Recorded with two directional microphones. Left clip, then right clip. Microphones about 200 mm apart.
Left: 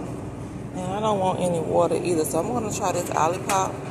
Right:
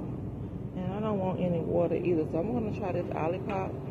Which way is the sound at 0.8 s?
10° left (ahead or behind).